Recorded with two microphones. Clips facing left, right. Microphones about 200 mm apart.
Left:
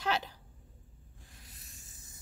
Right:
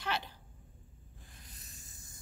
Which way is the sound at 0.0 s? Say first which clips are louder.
Left 4 dB; 40° left (ahead or behind).